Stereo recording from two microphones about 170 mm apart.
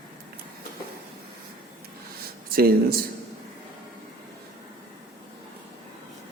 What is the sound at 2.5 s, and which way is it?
Speech, 60° right (ahead or behind).